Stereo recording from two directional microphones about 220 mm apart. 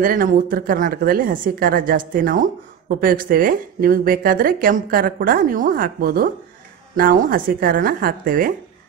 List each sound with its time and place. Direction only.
0.0 s a woman's voice: 40° right (ahead or behind)